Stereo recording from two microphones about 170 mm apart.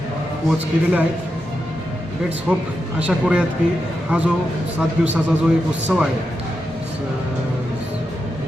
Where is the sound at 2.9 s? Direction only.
10° right (ahead or behind).